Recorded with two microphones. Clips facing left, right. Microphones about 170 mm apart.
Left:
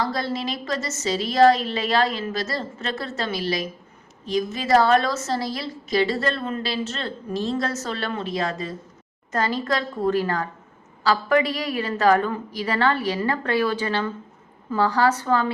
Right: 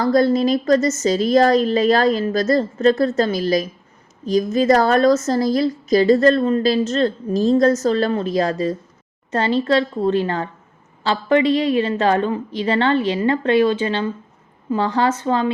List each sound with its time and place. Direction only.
0.0 s a woman's voice: 45° right (ahead or behind); by 15.5 s 20° right (ahead or behind)